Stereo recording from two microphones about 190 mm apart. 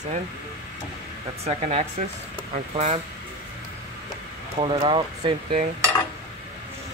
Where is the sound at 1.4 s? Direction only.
35° right (ahead or behind).